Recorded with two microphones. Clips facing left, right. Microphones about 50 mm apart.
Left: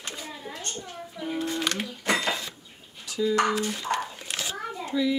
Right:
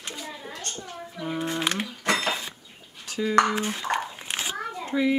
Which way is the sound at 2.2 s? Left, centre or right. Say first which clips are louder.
Right 1 dB; right.